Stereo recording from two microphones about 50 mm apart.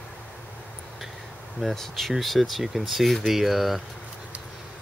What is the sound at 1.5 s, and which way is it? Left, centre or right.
Speech, centre.